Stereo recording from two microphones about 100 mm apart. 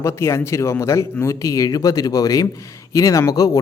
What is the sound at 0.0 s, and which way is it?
Speech, 25° left (ahead or behind).